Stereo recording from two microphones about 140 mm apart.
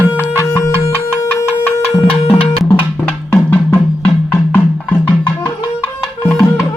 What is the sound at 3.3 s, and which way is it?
Music, 10° left (ahead or behind).